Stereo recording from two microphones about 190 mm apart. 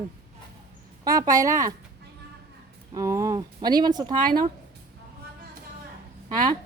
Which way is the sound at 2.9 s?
15° right (ahead or behind).